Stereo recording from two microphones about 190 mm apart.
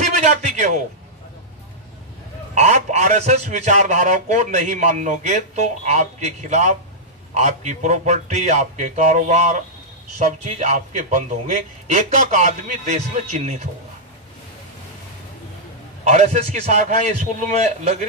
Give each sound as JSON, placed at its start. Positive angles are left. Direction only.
{"t": 0.0, "sound": "a man's voice", "side_deg": -40}
{"t": 2.5, "sound": "a man's voice", "side_deg": -35}
{"t": 16.0, "sound": "a man's voice", "side_deg": -35}